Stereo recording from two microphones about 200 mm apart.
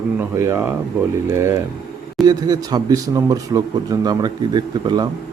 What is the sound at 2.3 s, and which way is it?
Speech, 20° right (ahead or behind).